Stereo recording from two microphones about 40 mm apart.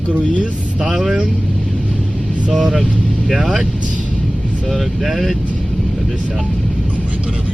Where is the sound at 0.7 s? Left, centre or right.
Centre.